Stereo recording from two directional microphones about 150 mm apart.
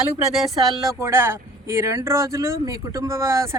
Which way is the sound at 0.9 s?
15° right (ahead or behind).